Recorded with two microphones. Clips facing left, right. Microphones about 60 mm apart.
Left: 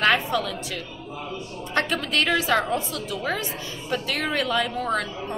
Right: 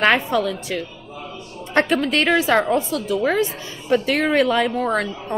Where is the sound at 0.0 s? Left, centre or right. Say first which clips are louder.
Right 4 dB; right.